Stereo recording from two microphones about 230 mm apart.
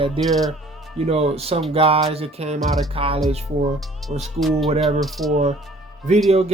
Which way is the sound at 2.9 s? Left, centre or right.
Right.